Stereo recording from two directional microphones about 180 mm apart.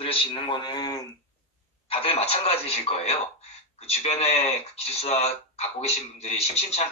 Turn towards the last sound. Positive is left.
turn(degrees=35)  # may be behind; listen again after turning